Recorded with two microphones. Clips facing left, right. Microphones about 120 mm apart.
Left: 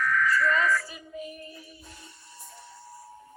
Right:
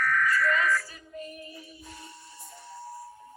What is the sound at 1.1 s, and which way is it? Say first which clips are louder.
Speech: left 1 dB; 5° left (ahead or behind).